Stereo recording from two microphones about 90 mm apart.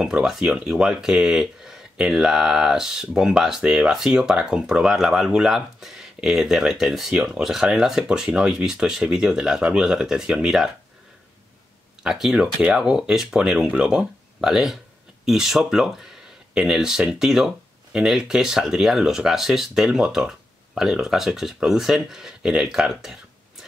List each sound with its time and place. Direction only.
0.0 s speech: 5° right (ahead or behind)
12.0 s speech: 5° right (ahead or behind)